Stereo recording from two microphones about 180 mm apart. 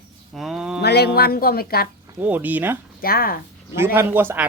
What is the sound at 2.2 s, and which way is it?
Speech, 10° right (ahead or behind).